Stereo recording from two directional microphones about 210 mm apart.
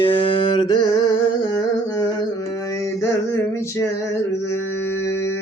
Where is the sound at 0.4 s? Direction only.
20° left (ahead or behind).